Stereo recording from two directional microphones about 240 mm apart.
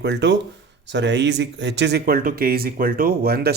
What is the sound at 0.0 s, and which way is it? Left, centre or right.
Speech, right.